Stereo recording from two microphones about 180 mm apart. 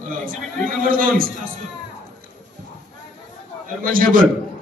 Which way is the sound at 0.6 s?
55° right (ahead or behind).